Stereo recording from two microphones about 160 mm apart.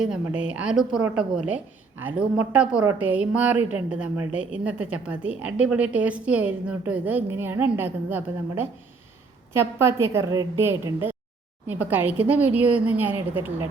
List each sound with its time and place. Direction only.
0.0 s a woman's voice: 5° right (ahead or behind)